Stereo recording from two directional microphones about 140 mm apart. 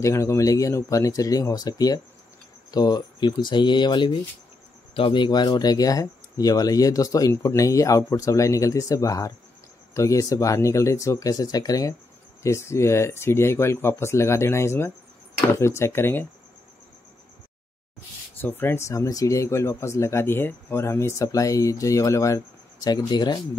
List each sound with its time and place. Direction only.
0.0 s speech: 20° left (ahead or behind)
18.4 s speech: 15° left (ahead or behind)